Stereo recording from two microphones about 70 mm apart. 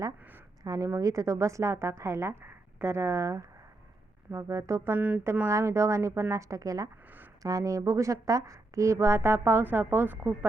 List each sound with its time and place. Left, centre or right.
0.6 s a woman's voice: right
0.9 s speech: right
4.9 s speech: centre
5.5 s speech: right